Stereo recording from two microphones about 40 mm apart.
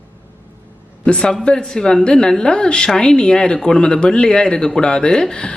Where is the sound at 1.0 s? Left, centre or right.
Left.